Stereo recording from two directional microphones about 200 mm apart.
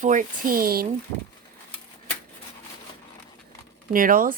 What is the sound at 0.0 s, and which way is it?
Speech, 40° right (ahead or behind).